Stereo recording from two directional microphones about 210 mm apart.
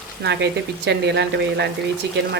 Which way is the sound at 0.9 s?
55° right (ahead or behind).